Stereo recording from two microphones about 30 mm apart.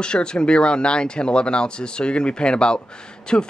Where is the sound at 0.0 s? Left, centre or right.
Left.